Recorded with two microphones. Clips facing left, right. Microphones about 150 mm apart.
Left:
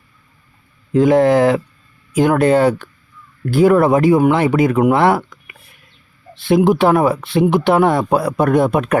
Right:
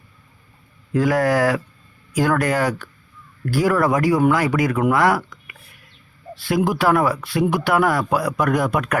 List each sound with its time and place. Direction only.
0.9 s speech: 25° left (ahead or behind)